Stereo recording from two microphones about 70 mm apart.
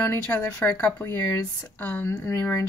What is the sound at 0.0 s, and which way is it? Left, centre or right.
Speech, left.